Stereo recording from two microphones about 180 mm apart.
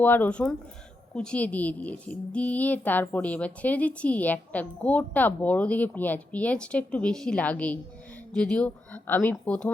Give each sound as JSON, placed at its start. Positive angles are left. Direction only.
{"t": 0.0, "sound": "a woman's voice", "side_deg": 10}